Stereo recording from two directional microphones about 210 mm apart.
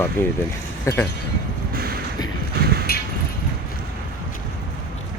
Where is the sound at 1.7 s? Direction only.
45° right (ahead or behind).